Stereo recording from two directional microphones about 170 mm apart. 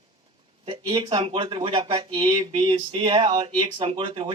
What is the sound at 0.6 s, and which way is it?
Speech, 30° right (ahead or behind).